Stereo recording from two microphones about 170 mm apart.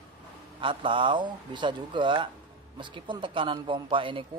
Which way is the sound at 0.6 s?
30° right (ahead or behind).